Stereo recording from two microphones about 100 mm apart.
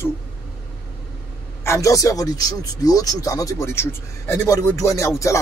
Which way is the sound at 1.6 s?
30° left (ahead or behind).